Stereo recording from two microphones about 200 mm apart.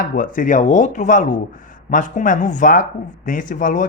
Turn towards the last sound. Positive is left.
turn(degrees=40)  # may be behind; listen again after turning